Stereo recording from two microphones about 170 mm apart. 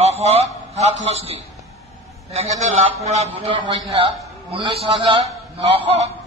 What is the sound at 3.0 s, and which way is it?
A man's voice, 40° right (ahead or behind).